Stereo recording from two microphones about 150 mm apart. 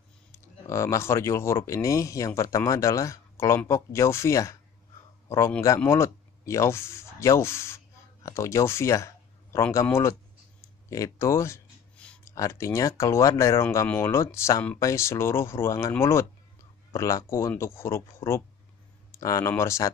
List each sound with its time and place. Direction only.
0.3 s speech: 20° left (ahead or behind)